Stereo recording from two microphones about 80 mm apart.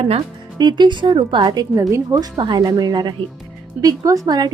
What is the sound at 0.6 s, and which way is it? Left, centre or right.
A woman's voice, right.